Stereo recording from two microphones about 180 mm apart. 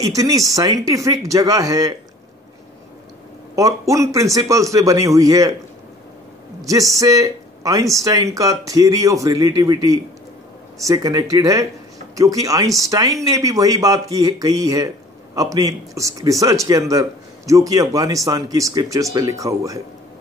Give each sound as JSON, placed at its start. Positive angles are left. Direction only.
{"t": 0.0, "sound": "speech", "side_deg": -20}
{"t": 3.5, "sound": "a man's voice", "side_deg": -20}
{"t": 6.6, "sound": "a man's voice", "side_deg": -20}